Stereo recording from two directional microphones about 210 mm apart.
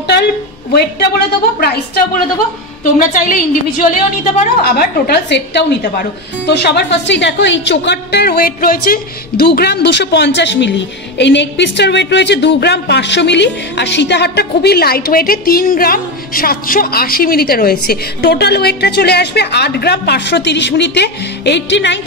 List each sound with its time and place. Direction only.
0.7 s a woman's voice: 50° left (ahead or behind)
3.0 s a woman's voice: 40° left (ahead or behind); by 22.0 s 60° left (ahead or behind)